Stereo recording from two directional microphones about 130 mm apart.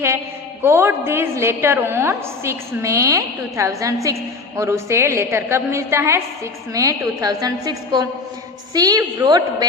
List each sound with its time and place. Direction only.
0.6 s a woman's voice: 20° right (ahead or behind)